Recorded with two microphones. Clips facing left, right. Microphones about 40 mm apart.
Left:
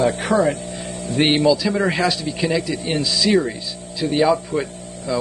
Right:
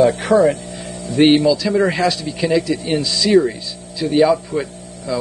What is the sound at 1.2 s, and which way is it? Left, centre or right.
A man's voice, centre.